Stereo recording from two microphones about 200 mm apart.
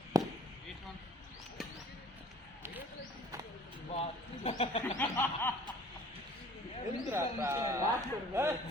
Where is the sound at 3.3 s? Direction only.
15° right (ahead or behind).